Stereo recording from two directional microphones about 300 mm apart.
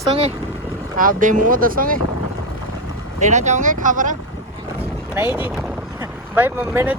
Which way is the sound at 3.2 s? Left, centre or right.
Right.